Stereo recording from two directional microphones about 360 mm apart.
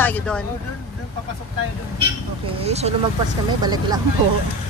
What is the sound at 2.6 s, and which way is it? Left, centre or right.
Speech, centre.